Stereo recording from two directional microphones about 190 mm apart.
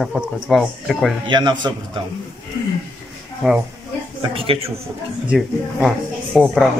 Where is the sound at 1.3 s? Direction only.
25° right (ahead or behind).